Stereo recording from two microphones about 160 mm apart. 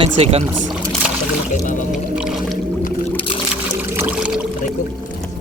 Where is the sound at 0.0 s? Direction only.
40° right (ahead or behind).